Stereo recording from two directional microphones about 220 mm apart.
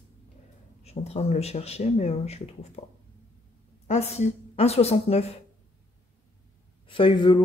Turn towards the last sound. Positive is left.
turn(degrees=20)  # may be behind; listen again after turning